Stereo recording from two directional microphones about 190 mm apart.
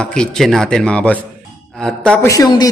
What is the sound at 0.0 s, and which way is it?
A man's voice, 5° left (ahead or behind).